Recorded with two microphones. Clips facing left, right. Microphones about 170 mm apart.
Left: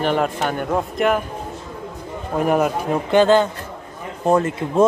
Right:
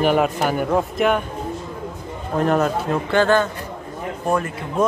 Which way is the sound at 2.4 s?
10° left (ahead or behind).